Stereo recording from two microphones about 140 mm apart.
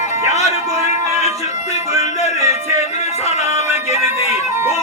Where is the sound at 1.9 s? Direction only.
50° left (ahead or behind).